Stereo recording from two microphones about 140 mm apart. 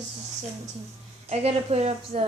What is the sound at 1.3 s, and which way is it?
Speech, 50° right (ahead or behind).